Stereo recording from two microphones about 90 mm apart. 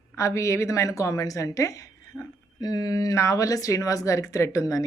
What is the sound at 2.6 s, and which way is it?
A woman's voice, 45° left (ahead or behind).